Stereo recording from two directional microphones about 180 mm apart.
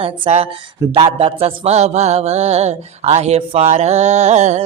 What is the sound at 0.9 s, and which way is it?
Mantra, 30° right (ahead or behind).